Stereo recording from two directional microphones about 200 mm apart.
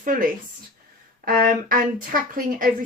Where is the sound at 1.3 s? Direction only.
45° right (ahead or behind).